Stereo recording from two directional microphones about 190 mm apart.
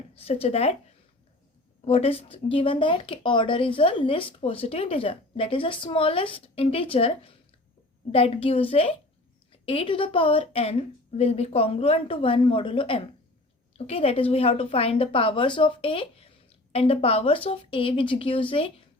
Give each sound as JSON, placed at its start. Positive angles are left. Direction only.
{"t": 0.1, "sound": "a woman's voice", "side_deg": 30}
{"t": 1.8, "sound": "a woman's voice", "side_deg": 30}